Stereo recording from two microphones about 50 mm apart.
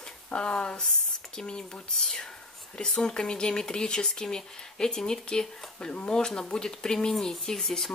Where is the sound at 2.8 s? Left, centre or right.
Centre.